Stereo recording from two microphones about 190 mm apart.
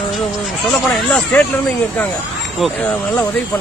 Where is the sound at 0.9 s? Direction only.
5° left (ahead or behind).